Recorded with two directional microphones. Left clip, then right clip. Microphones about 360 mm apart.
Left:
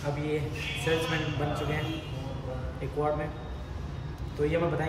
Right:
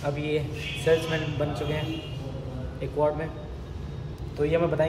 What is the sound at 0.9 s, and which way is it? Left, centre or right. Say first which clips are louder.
Speech: right 6 dB; centre.